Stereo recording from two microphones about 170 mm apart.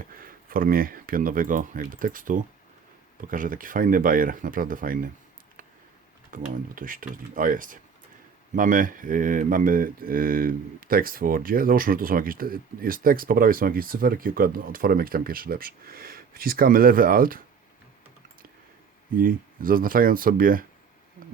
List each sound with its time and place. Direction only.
0.1 s speech: 55° right (ahead or behind)
3.2 s mantra: 55° right (ahead or behind)
6.3 s mantra: 55° right (ahead or behind)
6.7 s speech: 55° right (ahead or behind)
8.5 s mantra: 55° right (ahead or behind)
19.1 s mantra: 55° right (ahead or behind)